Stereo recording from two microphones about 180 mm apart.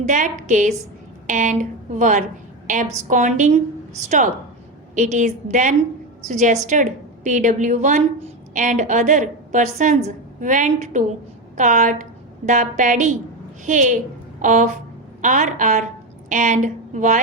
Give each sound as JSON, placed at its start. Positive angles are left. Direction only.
{"t": 0.0, "sound": "a woman's voice", "side_deg": -40}
{"t": 4.9, "sound": "a woman's voice", "side_deg": -40}